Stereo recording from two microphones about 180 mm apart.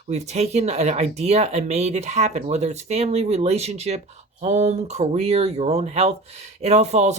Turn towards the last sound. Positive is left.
turn(degrees=-40)  # may be behind; listen again after turning